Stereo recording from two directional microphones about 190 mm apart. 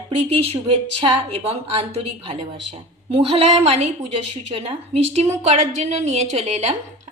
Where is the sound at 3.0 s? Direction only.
30° right (ahead or behind).